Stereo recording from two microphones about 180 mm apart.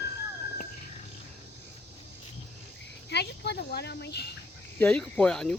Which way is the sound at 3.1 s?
65° left (ahead or behind).